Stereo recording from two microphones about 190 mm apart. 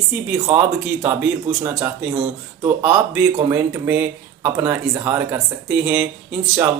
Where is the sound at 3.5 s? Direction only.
10° right (ahead or behind).